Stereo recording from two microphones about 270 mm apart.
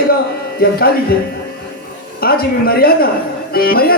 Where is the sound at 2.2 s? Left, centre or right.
Left.